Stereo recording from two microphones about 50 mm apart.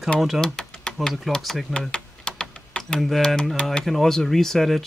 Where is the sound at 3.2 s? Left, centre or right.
Centre.